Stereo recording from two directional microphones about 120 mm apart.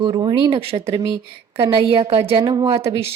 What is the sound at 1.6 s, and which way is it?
Speech, 45° right (ahead or behind).